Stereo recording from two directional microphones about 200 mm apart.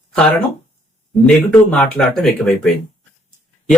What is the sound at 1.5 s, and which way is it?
Speech, 5° left (ahead or behind).